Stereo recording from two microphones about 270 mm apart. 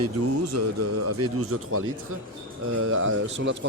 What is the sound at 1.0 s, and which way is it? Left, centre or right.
Speech, right.